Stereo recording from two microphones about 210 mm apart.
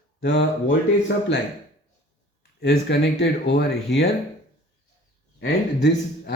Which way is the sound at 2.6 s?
55° left (ahead or behind).